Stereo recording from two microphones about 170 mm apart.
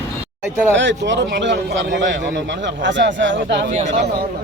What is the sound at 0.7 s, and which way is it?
A man's voice, 90° right.